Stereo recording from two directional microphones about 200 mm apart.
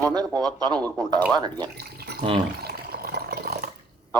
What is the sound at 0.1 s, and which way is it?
Speech, 20° right (ahead or behind).